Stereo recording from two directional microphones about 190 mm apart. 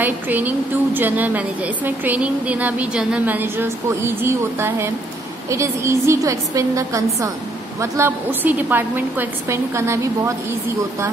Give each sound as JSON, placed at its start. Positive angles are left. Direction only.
{"t": 0.0, "sound": "a woman's voice", "side_deg": -10}